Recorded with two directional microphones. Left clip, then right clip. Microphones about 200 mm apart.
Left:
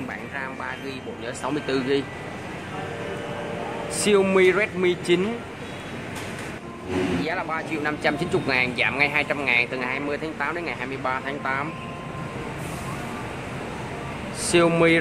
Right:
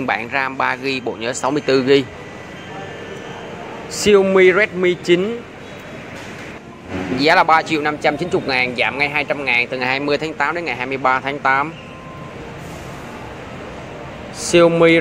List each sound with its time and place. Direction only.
0.1 s speech: 40° right (ahead or behind)
3.9 s speech: 15° right (ahead or behind)
7.2 s a man's voice: 40° right (ahead or behind); by 9.8 s 20° right (ahead or behind)
9.8 s a man's voice: 35° right (ahead or behind)
14.4 s speech: 15° right (ahead or behind)